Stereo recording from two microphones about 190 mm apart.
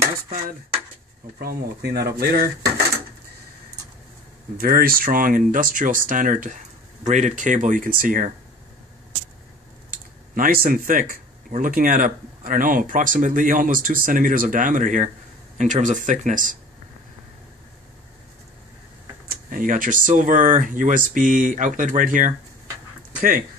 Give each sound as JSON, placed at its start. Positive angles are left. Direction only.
{"t": 1.4, "sound": "speech", "side_deg": -55}
{"t": 4.6, "sound": "speech", "side_deg": -50}
{"t": 10.3, "sound": "speech", "side_deg": -50}
{"t": 19.2, "sound": "speech", "side_deg": -45}